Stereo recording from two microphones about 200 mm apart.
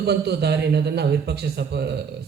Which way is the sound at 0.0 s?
55° right (ahead or behind).